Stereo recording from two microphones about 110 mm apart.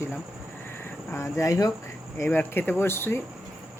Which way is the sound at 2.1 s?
20° left (ahead or behind).